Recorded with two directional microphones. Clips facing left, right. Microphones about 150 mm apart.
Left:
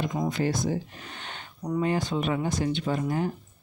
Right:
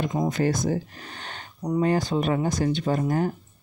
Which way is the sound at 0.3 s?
45° right (ahead or behind).